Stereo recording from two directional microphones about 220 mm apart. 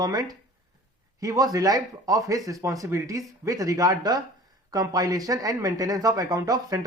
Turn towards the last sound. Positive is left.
turn(degrees=-15)  # may be behind; listen again after turning